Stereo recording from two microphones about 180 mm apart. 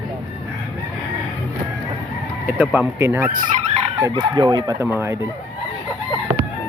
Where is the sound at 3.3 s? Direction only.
40° right (ahead or behind).